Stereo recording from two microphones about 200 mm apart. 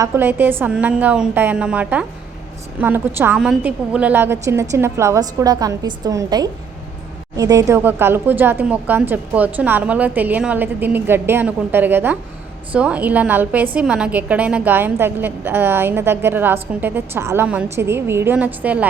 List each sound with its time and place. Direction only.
0.0 s a woman's voice: 10° right (ahead or behind)